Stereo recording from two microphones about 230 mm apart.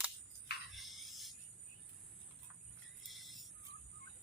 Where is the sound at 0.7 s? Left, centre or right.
Centre.